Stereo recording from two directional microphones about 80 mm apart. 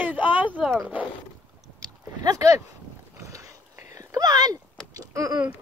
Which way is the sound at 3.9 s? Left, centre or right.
Right.